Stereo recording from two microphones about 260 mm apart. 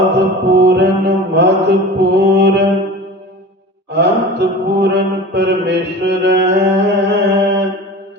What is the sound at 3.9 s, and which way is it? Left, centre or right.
Mantra, right.